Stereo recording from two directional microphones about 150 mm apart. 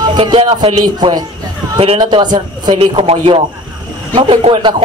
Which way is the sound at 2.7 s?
40° right (ahead or behind).